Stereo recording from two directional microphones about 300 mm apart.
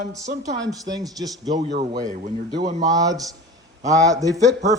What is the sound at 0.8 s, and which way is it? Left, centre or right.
Speech, centre.